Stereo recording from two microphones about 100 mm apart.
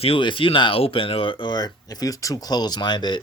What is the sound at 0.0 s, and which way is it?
Speech, 60° left (ahead or behind).